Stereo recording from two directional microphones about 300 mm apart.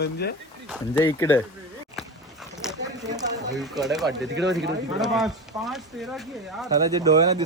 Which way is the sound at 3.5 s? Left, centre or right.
Centre.